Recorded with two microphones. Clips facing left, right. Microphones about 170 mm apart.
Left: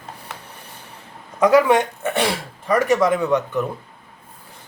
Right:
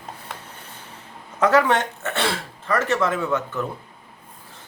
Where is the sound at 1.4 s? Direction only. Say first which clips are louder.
Left 4 dB; 10° left (ahead or behind).